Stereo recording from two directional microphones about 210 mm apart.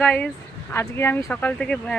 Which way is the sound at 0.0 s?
5° left (ahead or behind).